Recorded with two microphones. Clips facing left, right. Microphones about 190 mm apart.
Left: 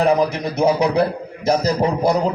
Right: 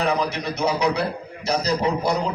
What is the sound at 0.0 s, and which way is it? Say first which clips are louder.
A man's voice: left 6 dB; 50° left (ahead or behind).